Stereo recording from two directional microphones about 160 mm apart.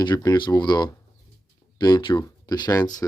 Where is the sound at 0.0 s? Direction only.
25° left (ahead or behind).